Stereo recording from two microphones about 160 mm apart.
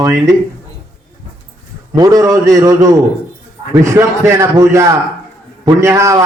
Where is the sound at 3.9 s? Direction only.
20° right (ahead or behind).